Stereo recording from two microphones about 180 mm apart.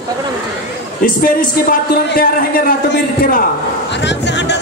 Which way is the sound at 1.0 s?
50° left (ahead or behind).